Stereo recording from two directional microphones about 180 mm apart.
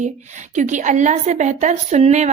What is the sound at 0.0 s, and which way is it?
Speech, 40° right (ahead or behind).